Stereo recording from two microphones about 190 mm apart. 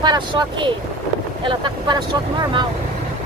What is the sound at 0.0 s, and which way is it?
Speech, 25° right (ahead or behind).